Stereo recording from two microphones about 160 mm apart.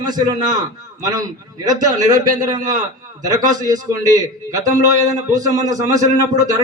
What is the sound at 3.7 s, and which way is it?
A man's voice, 20° right (ahead or behind).